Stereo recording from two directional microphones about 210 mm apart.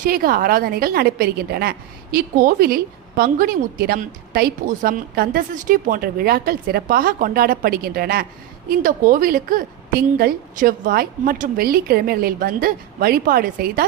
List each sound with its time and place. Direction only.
0.0 s a woman's voice: 45° right (ahead or behind)